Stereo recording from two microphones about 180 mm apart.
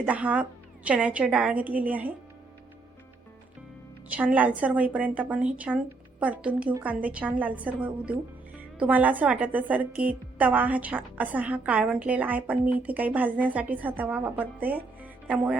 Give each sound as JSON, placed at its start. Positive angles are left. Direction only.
{"t": 0.0, "sound": "a woman's voice", "side_deg": -10}
{"t": 4.1, "sound": "a woman's voice", "side_deg": -10}